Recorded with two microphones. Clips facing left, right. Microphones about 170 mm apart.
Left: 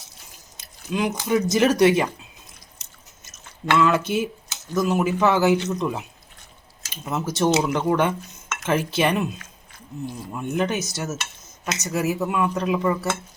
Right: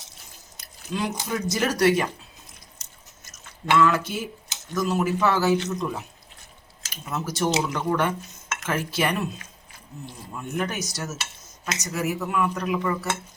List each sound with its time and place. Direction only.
0.6 s chewing: 20° left (ahead or behind)
1.3 s speech: 20° left (ahead or behind)
3.2 s speech: 20° left (ahead or behind)
10.3 s speech: 20° left (ahead or behind)